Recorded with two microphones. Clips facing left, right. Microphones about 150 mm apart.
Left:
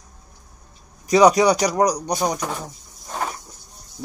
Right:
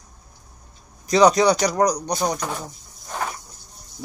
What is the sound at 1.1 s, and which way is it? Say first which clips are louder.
Speech: left 1 dB; 10° left (ahead or behind).